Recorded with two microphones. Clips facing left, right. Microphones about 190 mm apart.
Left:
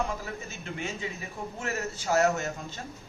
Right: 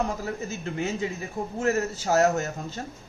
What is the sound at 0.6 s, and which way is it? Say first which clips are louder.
A man's voice: right 6 dB; 40° right (ahead or behind).